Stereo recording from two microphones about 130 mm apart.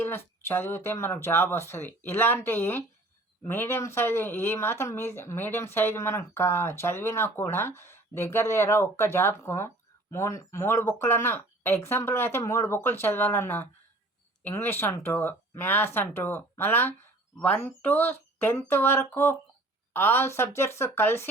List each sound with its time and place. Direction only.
0.0 s speech: 20° left (ahead or behind)